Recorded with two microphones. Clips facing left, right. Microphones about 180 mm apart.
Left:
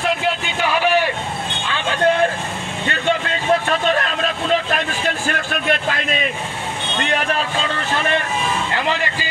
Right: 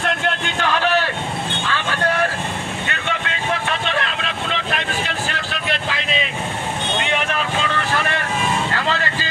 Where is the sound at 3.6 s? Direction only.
45° left (ahead or behind).